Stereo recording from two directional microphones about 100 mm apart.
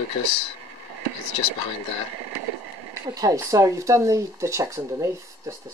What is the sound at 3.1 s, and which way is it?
Speech, 35° right (ahead or behind).